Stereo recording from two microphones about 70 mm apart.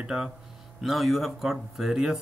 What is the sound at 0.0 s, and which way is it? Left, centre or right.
Speech, centre.